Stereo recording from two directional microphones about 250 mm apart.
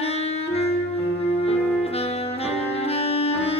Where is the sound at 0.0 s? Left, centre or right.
Left.